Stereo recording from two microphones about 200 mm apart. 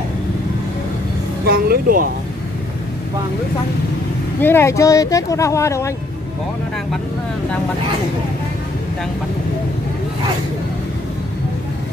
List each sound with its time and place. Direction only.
1.4 s speech: 50° right (ahead or behind)
4.4 s speech: 10° left (ahead or behind)